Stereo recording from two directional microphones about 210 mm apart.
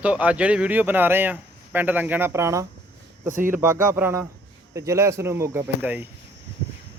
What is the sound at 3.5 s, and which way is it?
Speech, 10° right (ahead or behind).